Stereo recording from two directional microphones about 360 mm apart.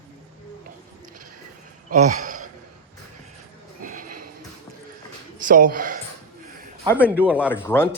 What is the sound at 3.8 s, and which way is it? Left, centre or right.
Horse, right.